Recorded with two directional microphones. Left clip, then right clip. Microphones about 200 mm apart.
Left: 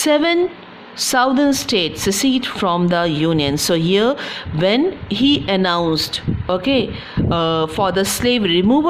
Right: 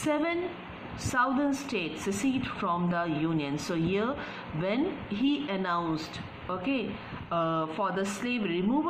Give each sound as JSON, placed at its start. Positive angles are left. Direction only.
{"t": 0.0, "sound": "a woman's voice", "side_deg": 55}